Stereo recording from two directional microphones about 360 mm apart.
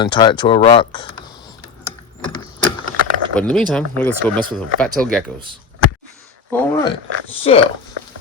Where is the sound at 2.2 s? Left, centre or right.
Centre.